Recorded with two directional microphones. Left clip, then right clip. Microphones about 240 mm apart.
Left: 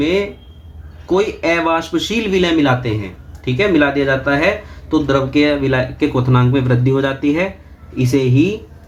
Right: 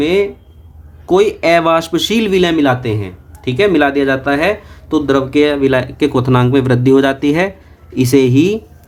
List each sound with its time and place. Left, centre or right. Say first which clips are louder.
0.0 s speech: right 3 dB; right